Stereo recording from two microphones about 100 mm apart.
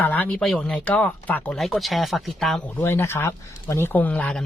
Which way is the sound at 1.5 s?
Centre (ahead or behind).